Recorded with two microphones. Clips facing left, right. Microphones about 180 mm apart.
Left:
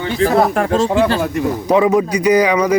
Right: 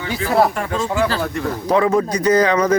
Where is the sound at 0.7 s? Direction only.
30° left (ahead or behind).